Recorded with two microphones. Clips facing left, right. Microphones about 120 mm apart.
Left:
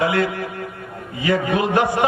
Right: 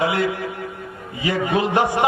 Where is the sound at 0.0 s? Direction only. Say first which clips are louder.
Left 1 dB; 20° right (ahead or behind).